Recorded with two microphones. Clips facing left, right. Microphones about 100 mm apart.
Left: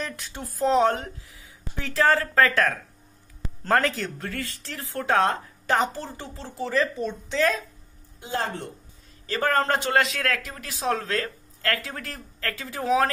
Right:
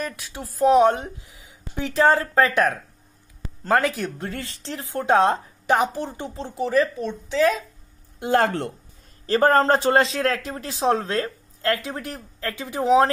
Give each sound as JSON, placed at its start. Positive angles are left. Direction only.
{"t": 0.0, "sound": "speech", "side_deg": -5}
{"t": 0.7, "sound": "a man's voice", "side_deg": -15}
{"t": 7.0, "sound": "speech", "side_deg": 0}
{"t": 8.2, "sound": "speech", "side_deg": -65}
{"t": 9.2, "sound": "a man's voice", "side_deg": -35}